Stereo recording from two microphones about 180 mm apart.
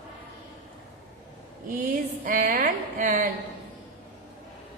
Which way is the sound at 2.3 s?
50° right (ahead or behind).